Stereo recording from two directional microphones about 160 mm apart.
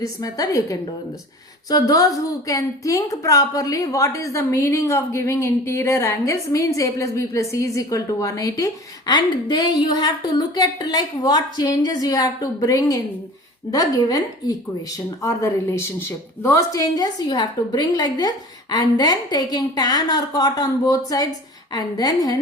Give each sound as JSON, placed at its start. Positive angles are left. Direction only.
{"t": 0.0, "sound": "a woman's voice", "side_deg": 20}